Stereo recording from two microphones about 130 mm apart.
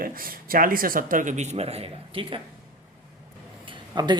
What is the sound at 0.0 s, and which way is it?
A man's voice, 90° right.